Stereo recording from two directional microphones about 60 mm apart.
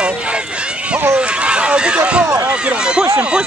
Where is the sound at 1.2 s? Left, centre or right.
Centre.